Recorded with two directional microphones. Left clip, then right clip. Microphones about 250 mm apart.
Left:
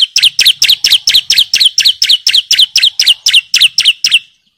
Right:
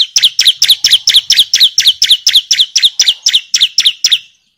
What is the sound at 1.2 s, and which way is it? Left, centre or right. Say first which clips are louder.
Chirp: even; centre.